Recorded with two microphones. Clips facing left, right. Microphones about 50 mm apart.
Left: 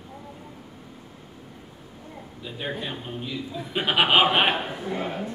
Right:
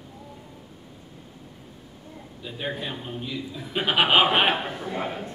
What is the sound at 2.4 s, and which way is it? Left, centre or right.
A man's voice, centre.